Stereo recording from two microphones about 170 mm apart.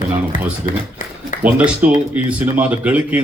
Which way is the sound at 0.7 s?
55° left (ahead or behind).